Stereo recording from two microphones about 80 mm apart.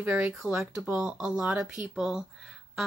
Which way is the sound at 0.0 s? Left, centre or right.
Centre.